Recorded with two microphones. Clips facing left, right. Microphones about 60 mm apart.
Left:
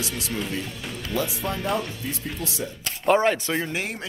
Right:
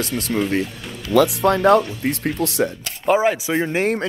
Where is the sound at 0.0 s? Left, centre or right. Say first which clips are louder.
Right 7 dB; right.